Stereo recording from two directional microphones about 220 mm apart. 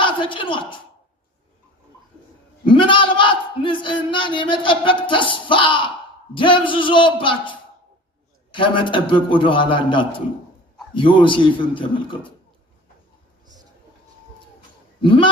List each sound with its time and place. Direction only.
0.0 s a woman's voice: 20° left (ahead or behind)
2.6 s a man's voice: 20° left (ahead or behind)
8.5 s a man's voice: 20° left (ahead or behind)
15.0 s a man's voice: 20° left (ahead or behind)